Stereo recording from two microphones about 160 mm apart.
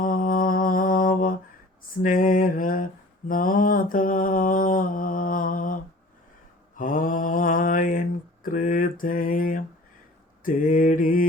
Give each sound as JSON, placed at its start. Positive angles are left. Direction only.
{"t": 0.0, "sound": "mantra", "side_deg": 55}
{"t": 6.7, "sound": "mantra", "side_deg": 60}